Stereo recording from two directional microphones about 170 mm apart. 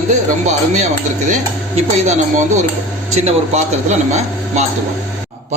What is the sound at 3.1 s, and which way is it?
A man's voice, 40° right (ahead or behind).